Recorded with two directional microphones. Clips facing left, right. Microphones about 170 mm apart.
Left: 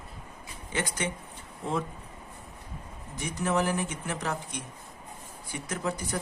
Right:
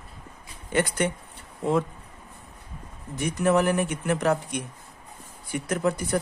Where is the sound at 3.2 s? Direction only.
60° right (ahead or behind).